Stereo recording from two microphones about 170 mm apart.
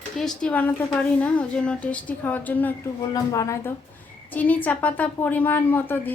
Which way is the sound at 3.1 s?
20° left (ahead or behind).